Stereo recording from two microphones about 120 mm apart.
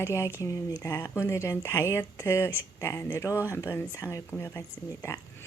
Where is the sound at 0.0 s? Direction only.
25° left (ahead or behind).